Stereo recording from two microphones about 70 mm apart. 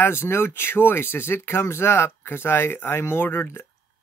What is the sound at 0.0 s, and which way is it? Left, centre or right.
Speech, left.